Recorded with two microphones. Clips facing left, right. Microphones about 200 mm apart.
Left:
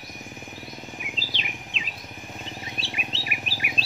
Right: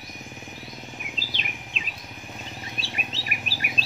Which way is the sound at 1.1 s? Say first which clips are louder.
Left 1 dB; 45° right (ahead or behind).